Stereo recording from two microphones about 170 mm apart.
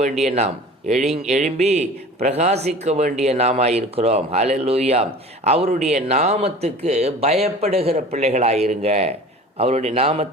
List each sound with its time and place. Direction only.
0.0 s speech: 40° right (ahead or behind)